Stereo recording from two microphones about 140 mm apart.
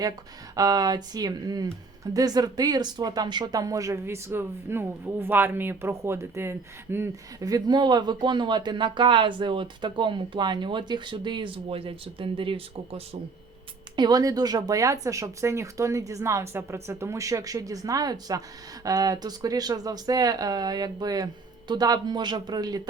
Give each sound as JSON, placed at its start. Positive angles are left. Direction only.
{"t": 0.5, "sound": "speech", "side_deg": -25}
{"t": 13.9, "sound": "speech", "side_deg": -30}